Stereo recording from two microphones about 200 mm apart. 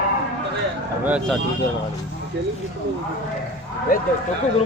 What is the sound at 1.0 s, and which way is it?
Speech, 5° right (ahead or behind).